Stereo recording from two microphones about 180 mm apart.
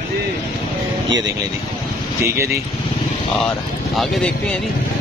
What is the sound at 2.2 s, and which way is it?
Speech, 15° right (ahead or behind).